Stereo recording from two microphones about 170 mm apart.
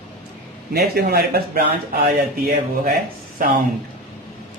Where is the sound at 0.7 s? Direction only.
70° right (ahead or behind).